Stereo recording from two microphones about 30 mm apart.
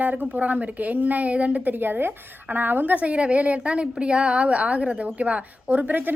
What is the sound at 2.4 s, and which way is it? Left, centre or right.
Speech, right.